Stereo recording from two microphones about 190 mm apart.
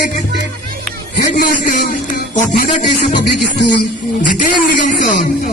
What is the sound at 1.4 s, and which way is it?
A man's voice, 45° left (ahead or behind).